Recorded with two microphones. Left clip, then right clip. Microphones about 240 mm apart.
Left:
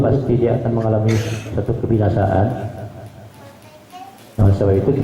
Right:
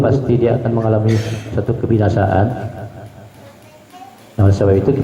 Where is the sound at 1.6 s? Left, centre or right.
Centre.